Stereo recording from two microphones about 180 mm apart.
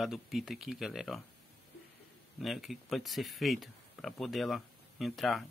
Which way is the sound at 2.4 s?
Centre (ahead or behind).